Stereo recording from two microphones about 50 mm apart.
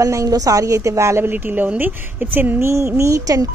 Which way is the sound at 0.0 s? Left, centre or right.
Right.